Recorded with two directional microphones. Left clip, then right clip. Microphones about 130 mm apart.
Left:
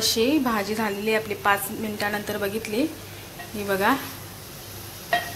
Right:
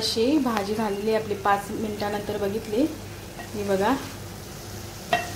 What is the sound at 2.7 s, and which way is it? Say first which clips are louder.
Speech: right 2 dB; 15° right (ahead or behind).